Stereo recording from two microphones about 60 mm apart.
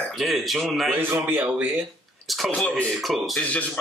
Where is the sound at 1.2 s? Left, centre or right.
Right.